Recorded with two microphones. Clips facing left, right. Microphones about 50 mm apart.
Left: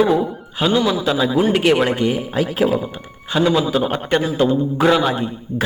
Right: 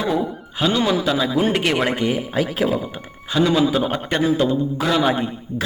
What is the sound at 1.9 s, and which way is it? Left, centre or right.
Speech, centre.